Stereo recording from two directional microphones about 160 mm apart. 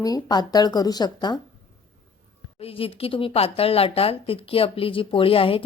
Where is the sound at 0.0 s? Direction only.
25° left (ahead or behind).